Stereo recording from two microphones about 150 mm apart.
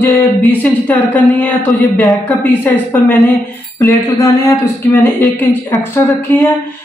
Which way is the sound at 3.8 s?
20° left (ahead or behind).